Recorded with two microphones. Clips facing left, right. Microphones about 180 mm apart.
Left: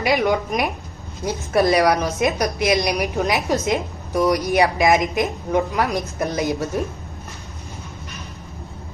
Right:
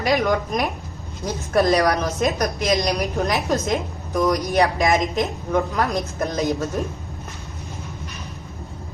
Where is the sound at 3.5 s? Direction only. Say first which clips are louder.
Left 1 dB; 15° left (ahead or behind).